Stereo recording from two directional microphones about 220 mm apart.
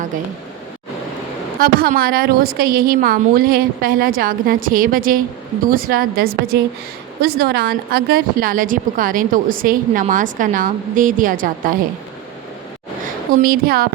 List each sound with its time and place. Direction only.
1.5 s a woman's voice: 40° right (ahead or behind)
13.3 s a woman's voice: 40° right (ahead or behind)